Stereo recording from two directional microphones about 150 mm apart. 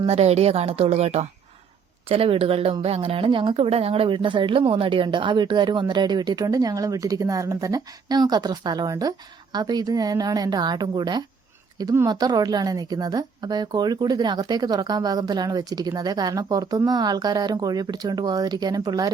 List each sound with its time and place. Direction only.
0.0 s a woman's voice: 45° right (ahead or behind); by 19.1 s 25° right (ahead or behind)